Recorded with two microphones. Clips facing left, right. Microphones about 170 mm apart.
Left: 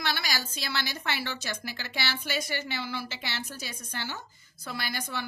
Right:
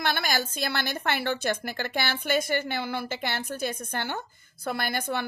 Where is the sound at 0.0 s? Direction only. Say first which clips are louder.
Right 5 dB; 55° right (ahead or behind).